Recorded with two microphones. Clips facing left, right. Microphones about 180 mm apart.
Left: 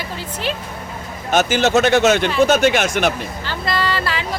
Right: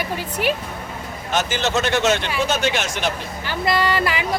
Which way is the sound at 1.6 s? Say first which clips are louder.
Left 7 dB; 50° left (ahead or behind).